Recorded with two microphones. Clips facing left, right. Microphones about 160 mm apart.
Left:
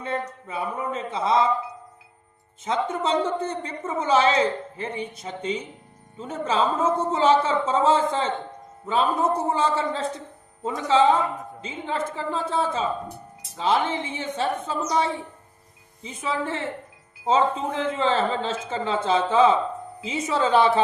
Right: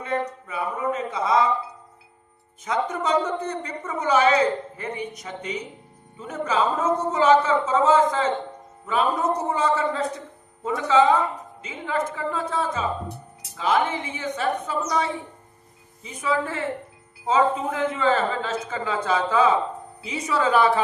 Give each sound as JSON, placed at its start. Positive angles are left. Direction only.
{"t": 0.0, "sound": "a woman's voice", "side_deg": 30}
{"t": 2.6, "sound": "a woman's voice", "side_deg": 30}